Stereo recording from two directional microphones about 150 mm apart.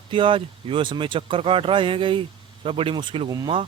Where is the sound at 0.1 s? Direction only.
35° right (ahead or behind).